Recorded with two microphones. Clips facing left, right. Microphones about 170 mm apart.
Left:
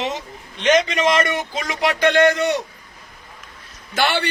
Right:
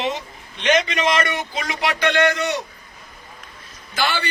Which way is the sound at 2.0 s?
45° left (ahead or behind).